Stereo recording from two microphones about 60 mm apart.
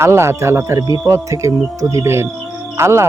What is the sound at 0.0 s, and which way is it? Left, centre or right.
Speech, right.